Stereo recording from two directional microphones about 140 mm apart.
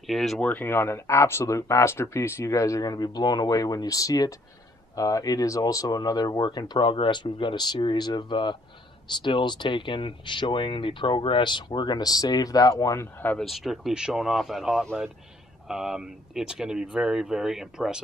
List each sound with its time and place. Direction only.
0.0 s speech: centre (ahead or behind)
0.5 s speech: 15° left (ahead or behind)
13.4 s speech: centre (ahead or behind)